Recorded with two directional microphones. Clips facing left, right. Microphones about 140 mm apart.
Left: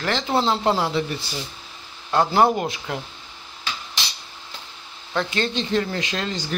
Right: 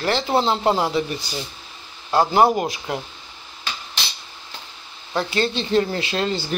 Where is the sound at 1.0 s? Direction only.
25° left (ahead or behind).